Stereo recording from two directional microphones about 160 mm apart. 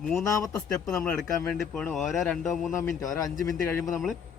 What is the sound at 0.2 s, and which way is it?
Speech, 20° left (ahead or behind).